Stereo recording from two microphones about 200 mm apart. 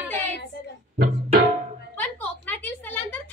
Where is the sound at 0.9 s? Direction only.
50° right (ahead or behind).